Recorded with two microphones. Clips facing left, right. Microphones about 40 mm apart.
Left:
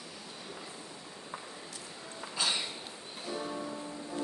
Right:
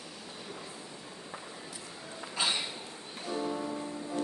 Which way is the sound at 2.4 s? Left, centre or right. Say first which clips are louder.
Right 1 dB; right.